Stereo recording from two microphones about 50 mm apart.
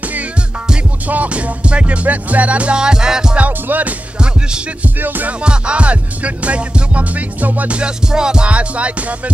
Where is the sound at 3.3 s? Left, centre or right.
Right.